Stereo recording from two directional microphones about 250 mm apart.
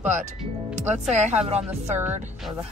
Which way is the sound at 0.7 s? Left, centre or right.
Right.